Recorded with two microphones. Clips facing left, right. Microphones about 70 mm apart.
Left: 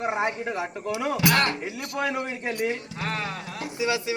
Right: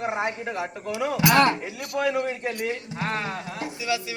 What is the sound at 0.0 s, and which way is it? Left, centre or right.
Speech, centre.